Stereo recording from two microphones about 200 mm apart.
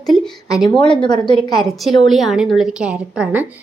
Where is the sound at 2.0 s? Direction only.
Centre (ahead or behind).